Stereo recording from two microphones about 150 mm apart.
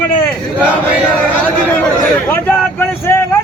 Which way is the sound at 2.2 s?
10° left (ahead or behind).